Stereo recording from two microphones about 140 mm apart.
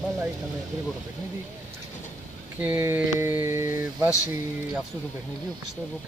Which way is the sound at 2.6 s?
15° right (ahead or behind).